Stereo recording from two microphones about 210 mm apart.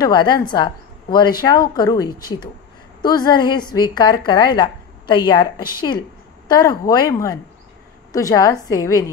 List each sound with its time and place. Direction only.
0.0 s a woman's voice: 20° left (ahead or behind)